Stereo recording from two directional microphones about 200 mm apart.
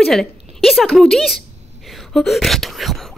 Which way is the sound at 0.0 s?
Centre (ahead or behind).